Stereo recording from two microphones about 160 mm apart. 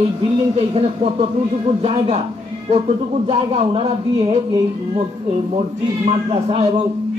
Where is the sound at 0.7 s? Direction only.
40° right (ahead or behind).